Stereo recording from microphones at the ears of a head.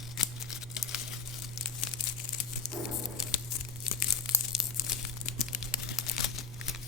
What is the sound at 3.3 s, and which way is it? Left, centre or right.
Tearing, left.